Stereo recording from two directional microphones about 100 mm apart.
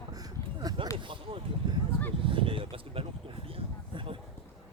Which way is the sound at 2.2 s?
60° right (ahead or behind).